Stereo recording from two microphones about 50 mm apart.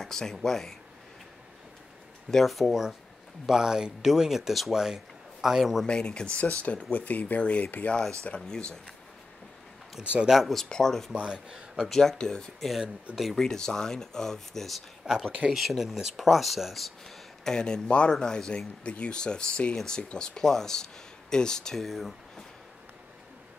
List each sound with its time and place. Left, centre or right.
0.0 s speech: centre
2.3 s speech: centre
5.9 s speech: centre
10.2 s speech: centre
10.7 s speech: centre
11.1 s speech: centre
11.9 s speech: centre
12.5 s speech: centre
13.4 s speech: centre
15.0 s speech: centre
15.5 s speech: centre
17.5 s speech: centre